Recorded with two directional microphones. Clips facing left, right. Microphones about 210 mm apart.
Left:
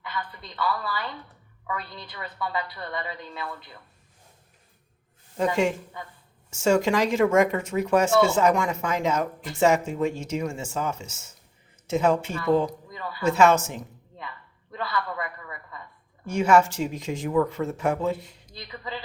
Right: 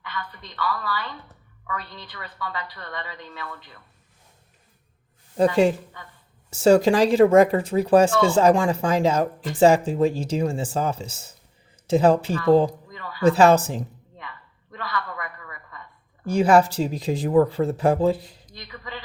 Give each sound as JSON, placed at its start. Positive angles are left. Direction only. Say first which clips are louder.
{"t": 0.1, "sound": "a woman's voice", "louder": "even", "side_deg": 25}
{"t": 5.4, "sound": "speech", "louder": "right 5 dB", "side_deg": -35}
{"t": 14.7, "sound": "a man's voice", "louder": "left 1 dB", "side_deg": 25}
{"t": 16.2, "sound": "speech", "louder": "right 3 dB", "side_deg": -35}